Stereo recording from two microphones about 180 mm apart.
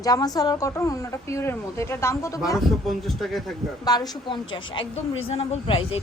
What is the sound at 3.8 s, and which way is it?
A woman's voice, 20° left (ahead or behind).